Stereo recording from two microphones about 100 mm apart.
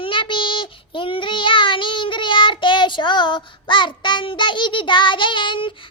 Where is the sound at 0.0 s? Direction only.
60° left (ahead or behind).